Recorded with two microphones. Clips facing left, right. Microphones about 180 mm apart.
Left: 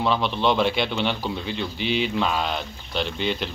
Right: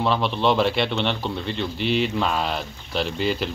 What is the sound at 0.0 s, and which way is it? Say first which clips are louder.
Speech: right 1 dB; centre (ahead or behind).